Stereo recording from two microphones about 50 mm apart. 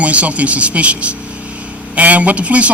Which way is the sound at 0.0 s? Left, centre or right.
Right.